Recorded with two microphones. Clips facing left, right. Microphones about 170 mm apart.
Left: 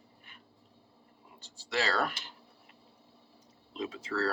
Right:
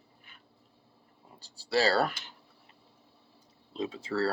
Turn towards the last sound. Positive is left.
turn(degrees=-30)  # may be behind; listen again after turning